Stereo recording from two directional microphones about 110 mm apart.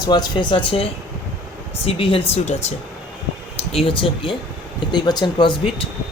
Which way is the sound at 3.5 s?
60° left (ahead or behind).